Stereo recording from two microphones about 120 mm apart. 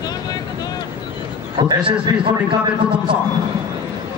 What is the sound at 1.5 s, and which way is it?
Speech, 45° right (ahead or behind).